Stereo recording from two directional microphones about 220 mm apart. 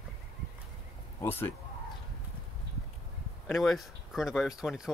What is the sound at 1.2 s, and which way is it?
Speech, 10° left (ahead or behind).